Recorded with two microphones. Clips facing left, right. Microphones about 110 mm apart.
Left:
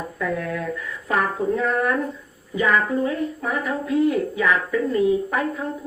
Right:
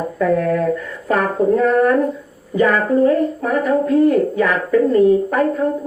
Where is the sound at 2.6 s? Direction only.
40° right (ahead or behind).